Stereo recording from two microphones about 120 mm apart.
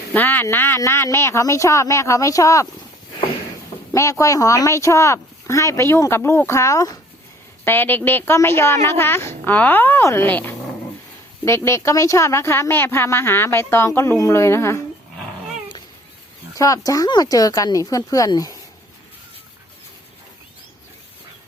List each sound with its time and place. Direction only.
0.1 s a sound: 15° left (ahead or behind)
0.4 s speech: 20° left (ahead or behind)
3.9 s speech: 25° left (ahead or behind)
7.6 s a woman's voice: 15° left (ahead or behind)
16.6 s speech: 30° left (ahead or behind)